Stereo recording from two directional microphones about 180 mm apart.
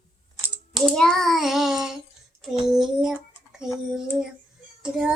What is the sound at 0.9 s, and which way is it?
Child singing, 5° left (ahead or behind).